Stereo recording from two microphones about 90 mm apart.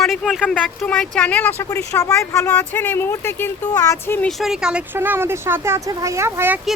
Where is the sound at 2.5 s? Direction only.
15° left (ahead or behind).